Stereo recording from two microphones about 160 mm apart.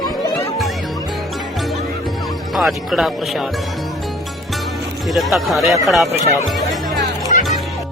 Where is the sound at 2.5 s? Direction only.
Centre (ahead or behind).